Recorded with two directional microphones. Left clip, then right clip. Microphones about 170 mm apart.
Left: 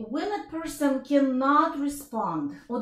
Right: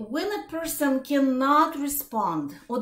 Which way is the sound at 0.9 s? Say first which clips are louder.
Left 1 dB; 20° right (ahead or behind).